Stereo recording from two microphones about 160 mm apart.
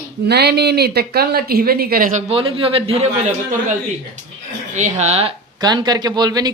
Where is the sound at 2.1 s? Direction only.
40° right (ahead or behind).